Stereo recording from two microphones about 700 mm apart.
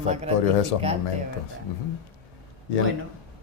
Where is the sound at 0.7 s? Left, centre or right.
Left.